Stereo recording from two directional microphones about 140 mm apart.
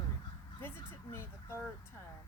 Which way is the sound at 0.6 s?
15° left (ahead or behind).